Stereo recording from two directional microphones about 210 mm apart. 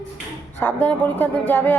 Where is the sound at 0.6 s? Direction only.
10° left (ahead or behind).